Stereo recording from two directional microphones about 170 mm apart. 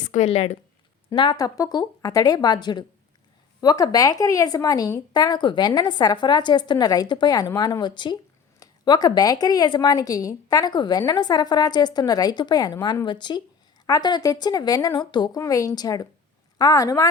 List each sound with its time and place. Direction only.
0.1 s a woman's voice: 40° left (ahead or behind)
1.1 s speech: 25° left (ahead or behind)